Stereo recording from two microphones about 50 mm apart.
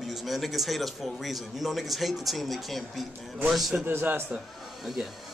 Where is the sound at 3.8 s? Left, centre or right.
Right.